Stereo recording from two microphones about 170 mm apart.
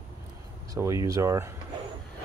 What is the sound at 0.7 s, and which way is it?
Speech, 20° right (ahead or behind).